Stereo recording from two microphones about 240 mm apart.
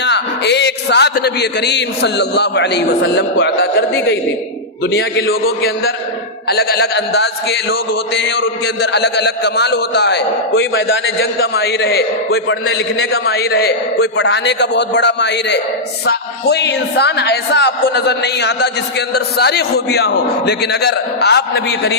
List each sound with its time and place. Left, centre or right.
0.0 s a man's voice: left